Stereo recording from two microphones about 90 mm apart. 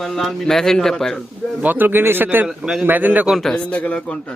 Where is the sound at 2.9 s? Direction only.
20° right (ahead or behind).